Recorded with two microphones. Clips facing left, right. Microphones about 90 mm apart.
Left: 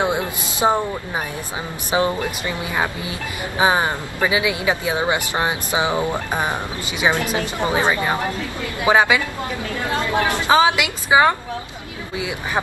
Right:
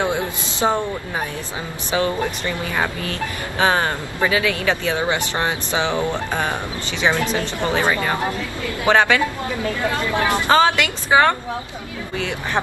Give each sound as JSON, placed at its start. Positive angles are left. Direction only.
{"t": 0.0, "sound": "speech", "side_deg": 15}
{"t": 1.9, "sound": "speech", "side_deg": 20}
{"t": 9.8, "sound": "speech", "side_deg": 20}
{"t": 10.5, "sound": "speech", "side_deg": 5}